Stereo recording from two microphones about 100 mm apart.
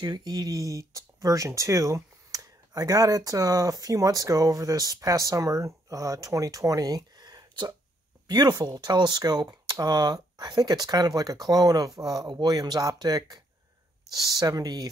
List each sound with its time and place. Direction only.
0.0 s speech: 45° right (ahead or behind)